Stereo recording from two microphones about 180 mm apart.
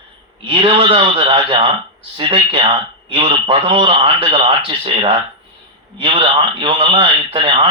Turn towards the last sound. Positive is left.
turn(degrees=-30)  # may be behind; listen again after turning